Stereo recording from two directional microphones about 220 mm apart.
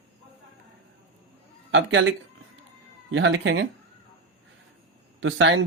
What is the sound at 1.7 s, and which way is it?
Speech, 60° right (ahead or behind).